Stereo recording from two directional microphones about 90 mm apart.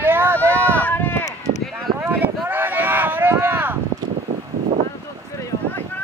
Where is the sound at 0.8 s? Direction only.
20° left (ahead or behind).